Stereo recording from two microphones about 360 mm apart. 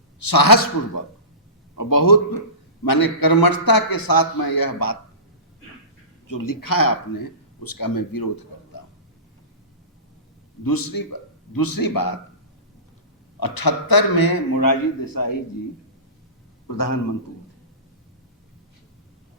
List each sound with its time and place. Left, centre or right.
0.2 s a man's voice: left
6.2 s speech: left
10.6 s a man's voice: left
13.4 s a man's voice: left
16.6 s a man's voice: left